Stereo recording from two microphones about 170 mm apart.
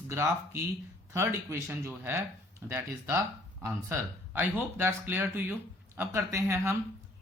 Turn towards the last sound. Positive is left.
turn(degrees=-15)  # may be behind; listen again after turning